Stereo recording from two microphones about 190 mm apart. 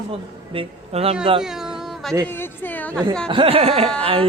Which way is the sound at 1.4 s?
5° right (ahead or behind).